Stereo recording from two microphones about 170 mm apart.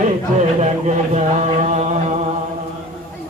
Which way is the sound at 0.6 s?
45° right (ahead or behind).